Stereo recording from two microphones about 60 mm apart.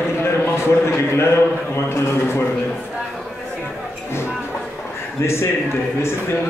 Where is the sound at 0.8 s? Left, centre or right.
Left.